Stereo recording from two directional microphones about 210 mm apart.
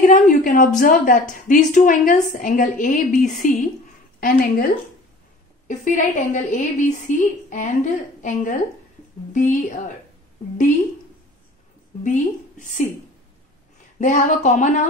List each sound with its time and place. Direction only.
0.0 s a woman's voice: 40° left (ahead or behind)
5.7 s a woman's voice: 35° left (ahead or behind)
12.0 s a woman's voice: 40° left (ahead or behind)
13.9 s a woman's voice: 35° left (ahead or behind)